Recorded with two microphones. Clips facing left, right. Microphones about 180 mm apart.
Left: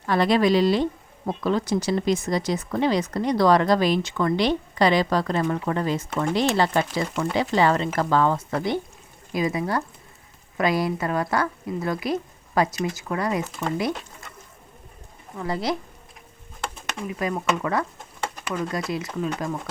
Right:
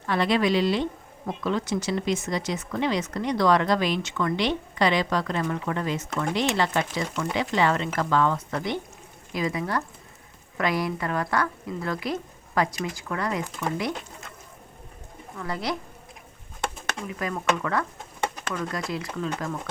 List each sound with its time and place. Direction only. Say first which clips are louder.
0.1 s a woman's voice: left 3 dB; 40° left (ahead or behind); by 13.7 s 25° left (ahead or behind)
15.4 s a woman's voice: left 4 dB; 25° left (ahead or behind)
17.1 s a woman's voice: left 2 dB; 20° left (ahead or behind)